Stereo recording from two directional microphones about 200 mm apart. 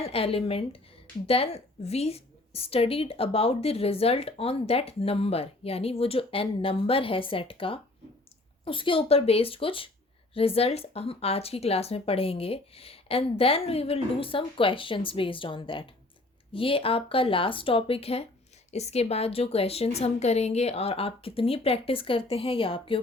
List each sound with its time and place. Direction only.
0.0 s a woman's voice: 30° left (ahead or behind)